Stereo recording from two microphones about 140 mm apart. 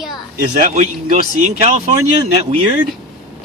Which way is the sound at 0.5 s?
55° right (ahead or behind).